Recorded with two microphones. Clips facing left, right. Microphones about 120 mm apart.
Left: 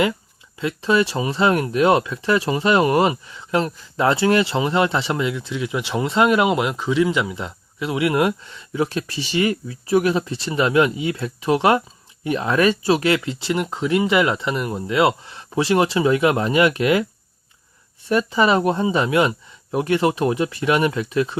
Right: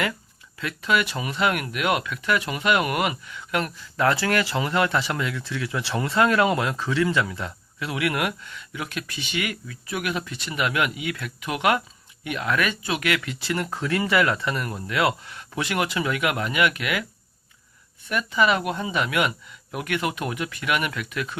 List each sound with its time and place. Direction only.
0.6 s speech: 30° left (ahead or behind)
18.1 s speech: 30° left (ahead or behind)